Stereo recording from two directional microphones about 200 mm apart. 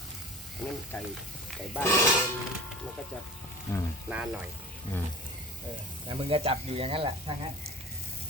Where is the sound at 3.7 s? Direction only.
15° left (ahead or behind).